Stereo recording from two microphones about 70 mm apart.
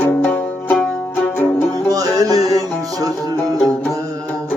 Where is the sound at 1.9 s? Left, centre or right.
Right.